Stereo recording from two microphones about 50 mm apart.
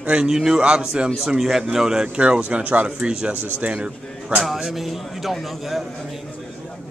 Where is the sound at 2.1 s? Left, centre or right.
Right.